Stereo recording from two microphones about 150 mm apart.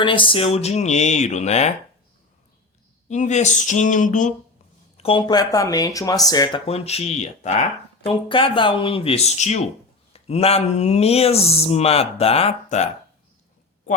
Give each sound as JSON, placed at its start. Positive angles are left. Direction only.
{"t": 0.0, "sound": "speech", "side_deg": 35}
{"t": 3.1, "sound": "a sound", "side_deg": 55}
{"t": 4.9, "sound": "a sound", "side_deg": 40}
{"t": 5.2, "sound": "speech", "side_deg": 25}
{"t": 6.7, "sound": "speech", "side_deg": 45}
{"t": 8.0, "sound": "speech", "side_deg": 35}